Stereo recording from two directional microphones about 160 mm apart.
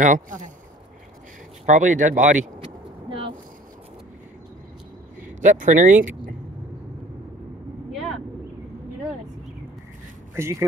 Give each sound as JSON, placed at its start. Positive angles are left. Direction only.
{"t": 0.0, "sound": "speech", "side_deg": -50}
{"t": 1.7, "sound": "speech", "side_deg": -50}
{"t": 2.6, "sound": "a sound", "side_deg": -35}
{"t": 5.4, "sound": "speech", "side_deg": -50}
{"t": 7.9, "sound": "vehicle", "side_deg": 0}
{"t": 10.3, "sound": "speech", "side_deg": -15}